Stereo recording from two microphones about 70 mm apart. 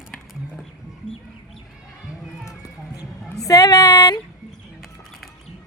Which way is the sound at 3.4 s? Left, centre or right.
Left.